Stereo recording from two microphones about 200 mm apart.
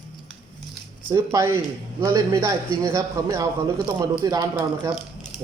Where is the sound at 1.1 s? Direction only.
15° right (ahead or behind).